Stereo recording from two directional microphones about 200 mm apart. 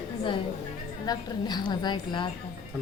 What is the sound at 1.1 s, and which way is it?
A woman's voice, 20° left (ahead or behind).